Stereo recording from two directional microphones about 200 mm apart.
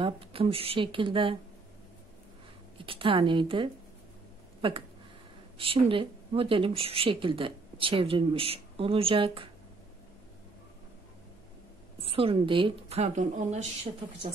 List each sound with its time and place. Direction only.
0.0 s speech: 25° right (ahead or behind)
2.8 s speech: 25° right (ahead or behind)
12.0 s speech: 30° right (ahead or behind)